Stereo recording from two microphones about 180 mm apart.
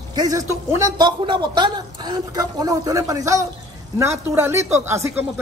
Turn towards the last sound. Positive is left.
turn(degrees=-15)  # may be behind; listen again after turning